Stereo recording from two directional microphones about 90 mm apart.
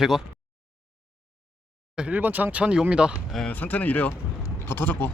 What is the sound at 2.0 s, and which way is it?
Speech, 15° right (ahead or behind).